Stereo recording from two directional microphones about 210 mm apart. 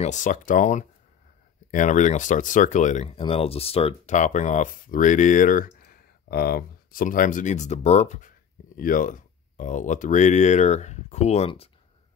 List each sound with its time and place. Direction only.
0.0 s speech: 35° left (ahead or behind)